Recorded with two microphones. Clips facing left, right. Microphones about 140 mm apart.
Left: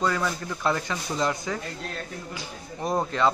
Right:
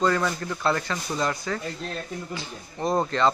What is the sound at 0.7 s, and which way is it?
Speech, 15° left (ahead or behind).